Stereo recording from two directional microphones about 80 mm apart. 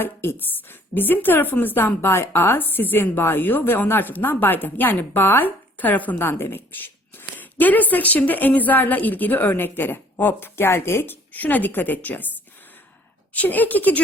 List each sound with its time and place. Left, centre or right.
0.0 s a woman's voice: left
13.3 s a woman's voice: left